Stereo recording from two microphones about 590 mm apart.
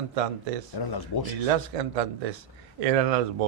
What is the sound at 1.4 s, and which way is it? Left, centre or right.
Speech, right.